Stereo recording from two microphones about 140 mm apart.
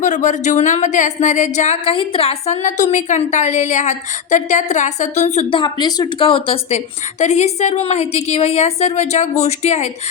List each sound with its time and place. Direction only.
0.0 s a woman's voice: 60° left (ahead or behind); by 2.6 s 40° left (ahead or behind)
2.6 s a woman's voice: 60° left (ahead or behind)
5.5 s a woman's voice: 35° left (ahead or behind); by 9.9 s 50° left (ahead or behind)